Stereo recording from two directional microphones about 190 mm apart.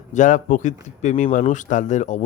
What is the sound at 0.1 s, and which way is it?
Speech, 40° left (ahead or behind).